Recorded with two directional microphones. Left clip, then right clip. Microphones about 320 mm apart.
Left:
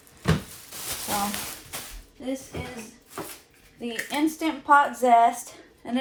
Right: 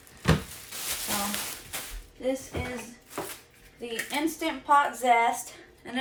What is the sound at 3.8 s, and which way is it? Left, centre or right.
Speech, left.